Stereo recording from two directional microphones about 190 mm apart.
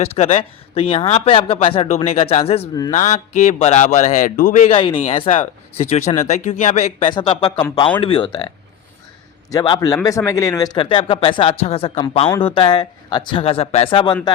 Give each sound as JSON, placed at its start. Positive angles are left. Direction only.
{"t": 0.0, "sound": "a man's voice", "side_deg": 30}
{"t": 9.5, "sound": "speech", "side_deg": 20}